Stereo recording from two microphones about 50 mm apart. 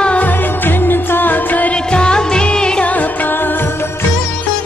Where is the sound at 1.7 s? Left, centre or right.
Centre.